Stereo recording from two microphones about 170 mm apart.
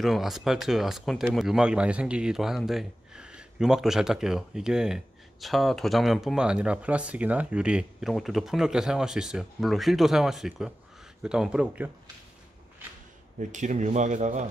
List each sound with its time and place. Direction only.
0.0 s speech: centre (ahead or behind)
13.4 s speech: 45° right (ahead or behind)